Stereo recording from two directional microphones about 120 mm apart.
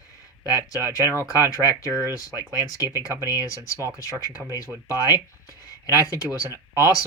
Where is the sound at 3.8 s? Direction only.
25° right (ahead or behind).